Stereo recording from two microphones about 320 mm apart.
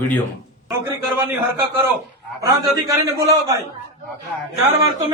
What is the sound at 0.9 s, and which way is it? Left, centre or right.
Speech, centre.